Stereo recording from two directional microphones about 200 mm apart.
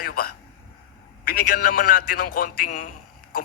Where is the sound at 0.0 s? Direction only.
45° left (ahead or behind).